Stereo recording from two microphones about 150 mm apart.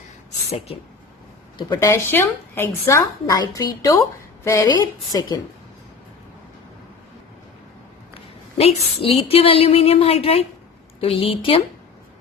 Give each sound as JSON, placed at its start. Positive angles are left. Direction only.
{"t": 1.5, "sound": "a woman's voice", "side_deg": 30}
{"t": 1.9, "sound": "a woman's voice", "side_deg": 15}
{"t": 8.5, "sound": "a woman's voice", "side_deg": 40}